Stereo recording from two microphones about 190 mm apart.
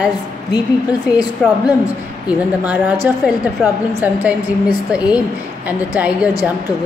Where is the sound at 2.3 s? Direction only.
5° right (ahead or behind).